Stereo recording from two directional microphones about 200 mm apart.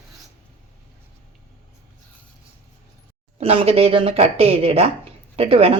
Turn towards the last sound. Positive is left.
turn(degrees=-30)  # may be behind; listen again after turning